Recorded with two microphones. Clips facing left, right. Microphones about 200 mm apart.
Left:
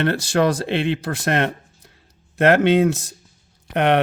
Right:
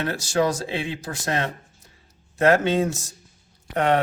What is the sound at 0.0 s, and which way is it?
Speech, 60° left (ahead or behind).